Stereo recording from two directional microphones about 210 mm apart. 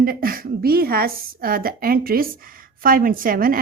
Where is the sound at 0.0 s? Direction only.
45° right (ahead or behind).